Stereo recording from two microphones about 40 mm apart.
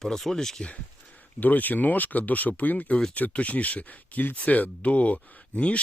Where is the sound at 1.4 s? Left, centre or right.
Left.